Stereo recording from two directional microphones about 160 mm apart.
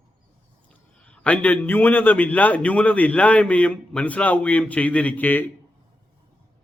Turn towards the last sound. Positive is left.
turn(degrees=10)  # may be behind; listen again after turning